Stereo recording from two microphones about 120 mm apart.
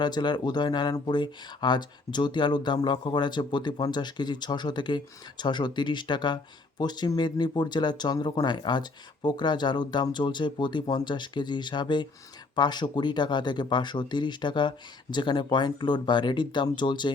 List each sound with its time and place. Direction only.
0.0 s speech: 40° left (ahead or behind)